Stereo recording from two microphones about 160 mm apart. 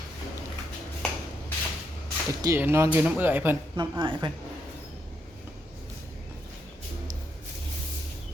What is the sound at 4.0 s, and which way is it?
Speech, 30° right (ahead or behind).